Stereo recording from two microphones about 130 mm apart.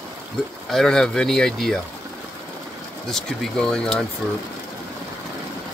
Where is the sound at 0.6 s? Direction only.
5° left (ahead or behind).